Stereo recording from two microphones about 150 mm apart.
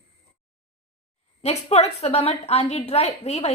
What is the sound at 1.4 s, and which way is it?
A woman's voice, 45° left (ahead or behind).